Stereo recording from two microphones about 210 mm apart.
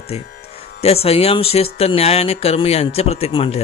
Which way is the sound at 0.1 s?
30° left (ahead or behind).